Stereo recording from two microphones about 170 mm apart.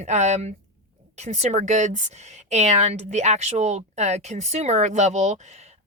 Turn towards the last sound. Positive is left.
turn(degrees=-45)  # may be behind; listen again after turning